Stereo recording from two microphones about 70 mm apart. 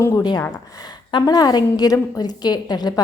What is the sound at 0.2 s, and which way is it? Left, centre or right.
A woman's voice, left.